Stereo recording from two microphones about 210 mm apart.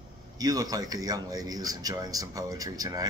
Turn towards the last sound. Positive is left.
turn(degrees=-20)  # may be behind; listen again after turning